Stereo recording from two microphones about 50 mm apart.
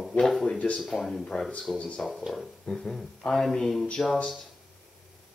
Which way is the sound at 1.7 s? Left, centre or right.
Left.